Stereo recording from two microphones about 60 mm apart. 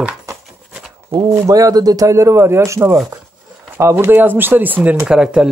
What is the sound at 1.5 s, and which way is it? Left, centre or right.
Speech, right.